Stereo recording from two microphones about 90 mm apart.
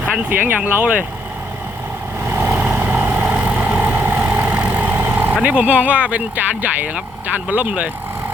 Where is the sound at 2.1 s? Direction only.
25° right (ahead or behind).